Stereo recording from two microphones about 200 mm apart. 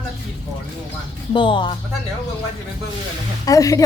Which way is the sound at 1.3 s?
25° left (ahead or behind).